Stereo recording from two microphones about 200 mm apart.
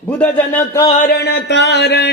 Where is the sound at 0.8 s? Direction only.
35° left (ahead or behind).